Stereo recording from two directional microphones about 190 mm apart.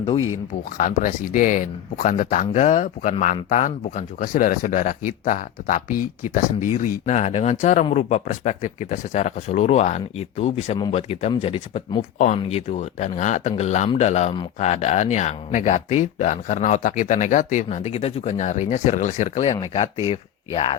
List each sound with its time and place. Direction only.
0.8 s speech: 45° left (ahead or behind); by 20.7 s 30° left (ahead or behind)